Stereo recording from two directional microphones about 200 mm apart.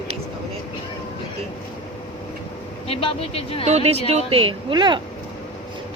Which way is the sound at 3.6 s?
30° right (ahead or behind).